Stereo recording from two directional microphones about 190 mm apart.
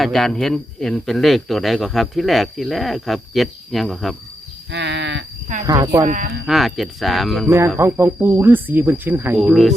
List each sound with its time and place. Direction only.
0.0 s speech: centre (ahead or behind)
4.7 s a sound: 70° right (ahead or behind)
5.6 s speech: 20° right (ahead or behind)
6.1 s speech: 40° right (ahead or behind)
6.4 s speech: centre (ahead or behind)
7.8 s speech: 10° right (ahead or behind)